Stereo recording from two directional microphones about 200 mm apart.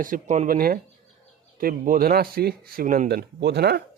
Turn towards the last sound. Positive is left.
turn(degrees=-55)  # may be behind; listen again after turning